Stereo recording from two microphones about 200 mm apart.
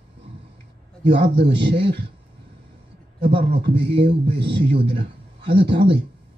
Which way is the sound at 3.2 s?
25° right (ahead or behind).